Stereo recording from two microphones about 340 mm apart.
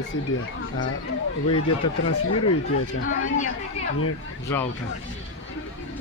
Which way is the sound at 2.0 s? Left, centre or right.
Left.